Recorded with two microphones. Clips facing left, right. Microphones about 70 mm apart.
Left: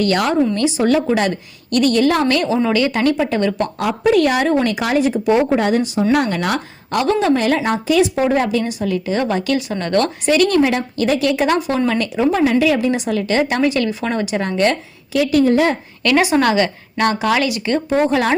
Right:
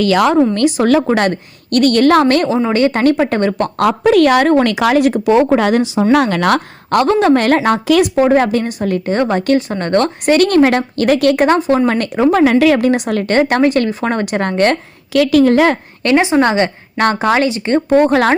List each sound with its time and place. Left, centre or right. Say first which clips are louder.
0.5 s a woman's voice: right 4 dB; right
1.0 s a woman's voice: right 3 dB; right
2.2 s a woman's voice: right 3 dB; right
3.8 s a woman's voice: right 5 dB; right
4.4 s speech: right 5 dB; right
7.0 s a woman's voice: right 4 dB; right
8.1 s a woman's voice: right 5 dB; right
11.4 s speech: right 5 dB; right
11.9 s a woman's voice: right 4 dB; right
15.1 s speech: right 4 dB; right
16.0 s speech: right 3 dB; right
17.8 s a woman's voice: right 6 dB; right